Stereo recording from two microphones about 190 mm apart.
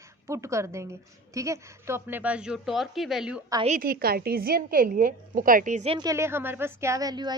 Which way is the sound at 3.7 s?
50° right (ahead or behind).